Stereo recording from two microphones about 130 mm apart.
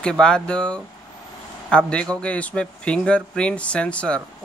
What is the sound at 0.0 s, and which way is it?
Speech, 5° left (ahead or behind).